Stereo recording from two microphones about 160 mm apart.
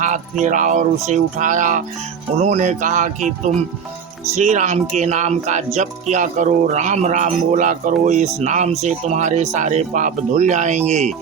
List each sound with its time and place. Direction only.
0.4 s speech: 50° right (ahead or behind)